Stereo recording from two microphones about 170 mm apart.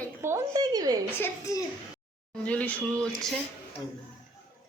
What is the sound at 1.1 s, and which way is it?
Speech, 15° left (ahead or behind).